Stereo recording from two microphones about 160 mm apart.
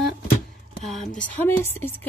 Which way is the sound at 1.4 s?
15° left (ahead or behind).